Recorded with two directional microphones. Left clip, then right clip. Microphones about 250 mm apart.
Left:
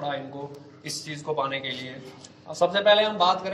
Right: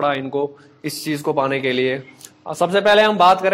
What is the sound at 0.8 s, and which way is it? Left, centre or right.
A man's voice, right.